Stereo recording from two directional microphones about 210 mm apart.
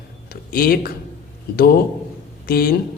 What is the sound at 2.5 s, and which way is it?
Speech, 45° left (ahead or behind).